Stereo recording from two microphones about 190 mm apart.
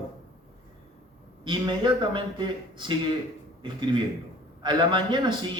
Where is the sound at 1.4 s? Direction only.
25° right (ahead or behind).